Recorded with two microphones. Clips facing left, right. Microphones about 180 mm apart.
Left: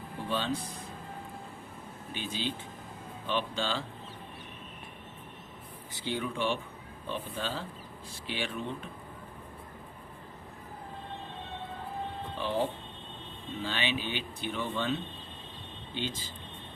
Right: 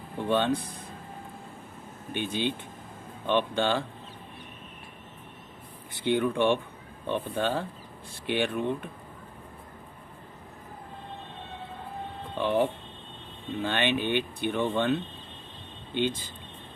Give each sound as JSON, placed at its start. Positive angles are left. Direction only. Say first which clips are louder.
{"t": 0.3, "sound": "speech", "louder": "right 8 dB", "side_deg": -60}
{"t": 2.1, "sound": "speech", "louder": "right 6 dB", "side_deg": -60}
{"t": 5.9, "sound": "speech", "louder": "right 9 dB", "side_deg": -60}
{"t": 12.4, "sound": "speech", "louder": "right 6 dB", "side_deg": -60}
{"t": 16.0, "sound": "speech", "louder": "right 8 dB", "side_deg": -60}